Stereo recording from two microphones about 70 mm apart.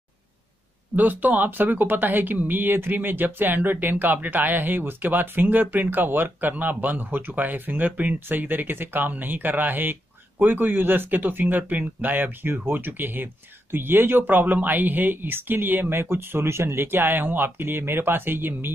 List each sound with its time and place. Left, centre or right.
0.9 s speech: right